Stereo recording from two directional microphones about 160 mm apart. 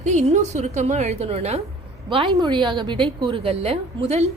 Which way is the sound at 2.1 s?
30° right (ahead or behind).